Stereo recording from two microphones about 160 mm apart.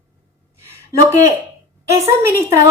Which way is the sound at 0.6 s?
20° right (ahead or behind).